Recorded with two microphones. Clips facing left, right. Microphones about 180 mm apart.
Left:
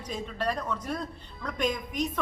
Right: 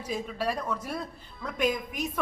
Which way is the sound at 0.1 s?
10° right (ahead or behind).